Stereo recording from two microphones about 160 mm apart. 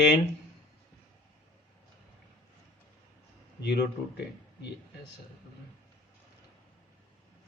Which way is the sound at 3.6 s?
90° left.